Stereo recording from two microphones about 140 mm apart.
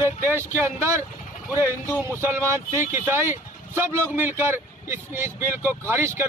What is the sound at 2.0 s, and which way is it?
Speech, 15° right (ahead or behind).